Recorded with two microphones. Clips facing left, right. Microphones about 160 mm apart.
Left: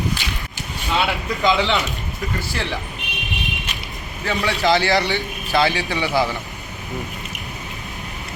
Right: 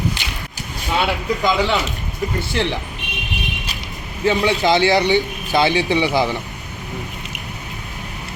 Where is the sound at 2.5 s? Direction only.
20° right (ahead or behind).